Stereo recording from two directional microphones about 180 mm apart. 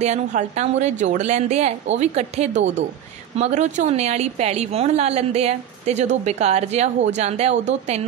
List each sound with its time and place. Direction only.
0.0 s a woman's voice: 40° right (ahead or behind)